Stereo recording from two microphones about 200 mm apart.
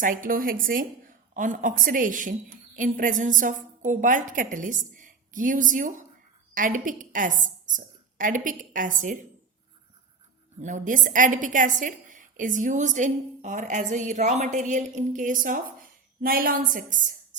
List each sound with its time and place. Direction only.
0.0 s a woman's voice: 45° right (ahead or behind)
10.6 s a woman's voice: 40° right (ahead or behind)